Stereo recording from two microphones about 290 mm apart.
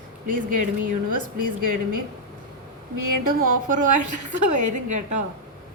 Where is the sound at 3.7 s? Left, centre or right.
Right.